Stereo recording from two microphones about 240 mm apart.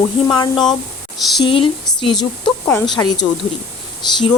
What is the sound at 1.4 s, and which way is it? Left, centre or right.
Speech, left.